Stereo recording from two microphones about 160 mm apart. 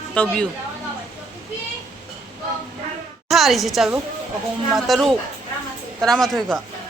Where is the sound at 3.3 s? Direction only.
Centre (ahead or behind).